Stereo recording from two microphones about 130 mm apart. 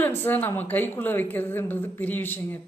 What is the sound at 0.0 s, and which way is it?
Speech, 15° left (ahead or behind).